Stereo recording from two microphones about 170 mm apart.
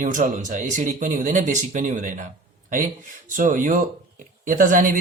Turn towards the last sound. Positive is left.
turn(degrees=-50)  # may be behind; listen again after turning